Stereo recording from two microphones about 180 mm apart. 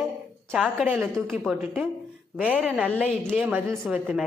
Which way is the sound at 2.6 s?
5° right (ahead or behind).